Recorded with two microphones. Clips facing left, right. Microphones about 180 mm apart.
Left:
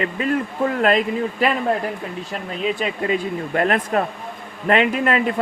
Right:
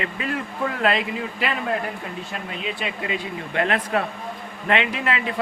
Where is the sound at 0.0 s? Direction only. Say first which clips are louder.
Left 6 dB; 40° left (ahead or behind).